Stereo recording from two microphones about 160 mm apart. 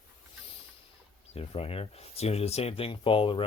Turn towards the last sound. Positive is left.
turn(degrees=35)  # may be behind; listen again after turning